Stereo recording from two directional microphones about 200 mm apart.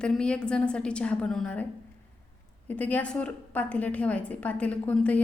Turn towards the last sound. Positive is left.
turn(degrees=5)  # may be behind; listen again after turning